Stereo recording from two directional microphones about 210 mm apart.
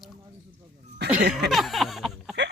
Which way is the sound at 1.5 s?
Centre (ahead or behind).